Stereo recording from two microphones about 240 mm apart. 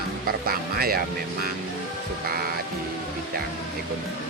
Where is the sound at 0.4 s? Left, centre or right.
Right.